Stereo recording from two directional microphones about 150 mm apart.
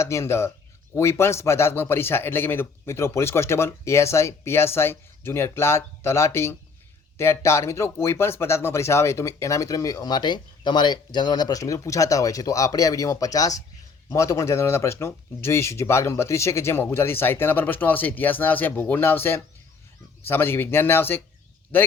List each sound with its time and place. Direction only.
0.0 s a man's voice: 20° left (ahead or behind)